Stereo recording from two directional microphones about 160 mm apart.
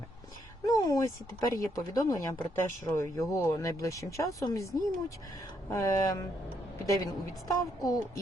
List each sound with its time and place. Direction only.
0.6 s speech: 25° left (ahead or behind)